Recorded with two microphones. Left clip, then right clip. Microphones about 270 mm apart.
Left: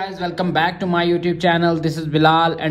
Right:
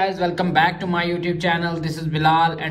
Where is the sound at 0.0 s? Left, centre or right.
Centre.